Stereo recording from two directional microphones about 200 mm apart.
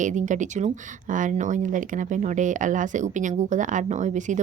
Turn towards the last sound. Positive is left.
turn(degrees=-40)  # may be behind; listen again after turning